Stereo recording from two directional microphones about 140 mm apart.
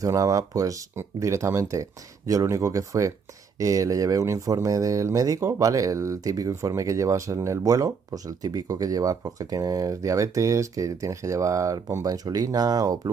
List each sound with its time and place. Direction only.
0.0 s speech: 25° right (ahead or behind)